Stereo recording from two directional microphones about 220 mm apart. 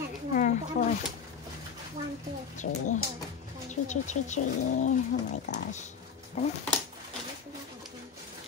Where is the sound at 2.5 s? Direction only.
35° left (ahead or behind).